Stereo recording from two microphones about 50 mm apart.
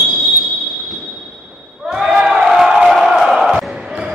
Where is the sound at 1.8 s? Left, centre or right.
Centre.